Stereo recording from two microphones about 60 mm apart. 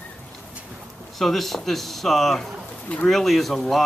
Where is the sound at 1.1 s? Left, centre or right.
Centre.